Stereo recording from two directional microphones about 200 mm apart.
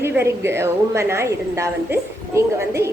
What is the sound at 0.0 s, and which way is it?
A woman's voice, 10° right (ahead or behind).